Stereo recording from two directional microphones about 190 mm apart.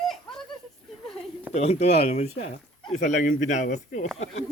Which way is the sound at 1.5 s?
35° left (ahead or behind).